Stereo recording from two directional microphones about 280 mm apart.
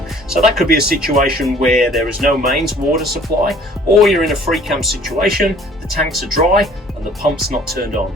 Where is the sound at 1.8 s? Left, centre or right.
Centre.